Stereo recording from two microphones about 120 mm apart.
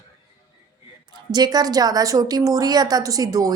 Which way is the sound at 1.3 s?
35° right (ahead or behind).